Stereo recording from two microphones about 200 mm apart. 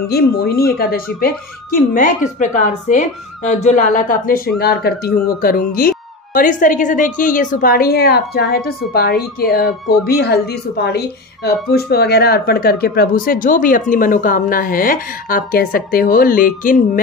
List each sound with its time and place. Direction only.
0.1 s speech: 50° left (ahead or behind)